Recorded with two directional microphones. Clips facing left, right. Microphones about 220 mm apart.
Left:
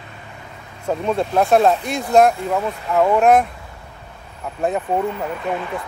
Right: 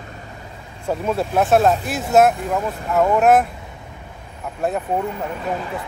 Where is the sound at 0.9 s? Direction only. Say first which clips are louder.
Left 1 dB; 5° right (ahead or behind).